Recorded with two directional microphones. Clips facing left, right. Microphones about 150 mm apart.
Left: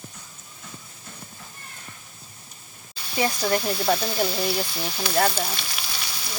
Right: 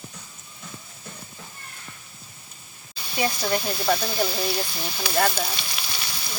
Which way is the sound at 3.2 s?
5° right (ahead or behind).